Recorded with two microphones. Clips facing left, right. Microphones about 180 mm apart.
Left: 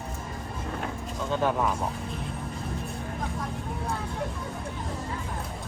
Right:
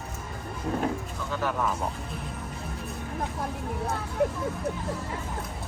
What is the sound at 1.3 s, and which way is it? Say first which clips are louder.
Speech: left 4 dB; 20° left (ahead or behind).